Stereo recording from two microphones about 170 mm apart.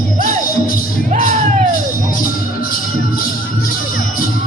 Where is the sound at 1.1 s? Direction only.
50° right (ahead or behind).